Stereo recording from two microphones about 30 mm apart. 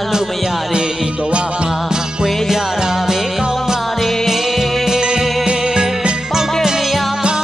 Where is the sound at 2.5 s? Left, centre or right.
Centre.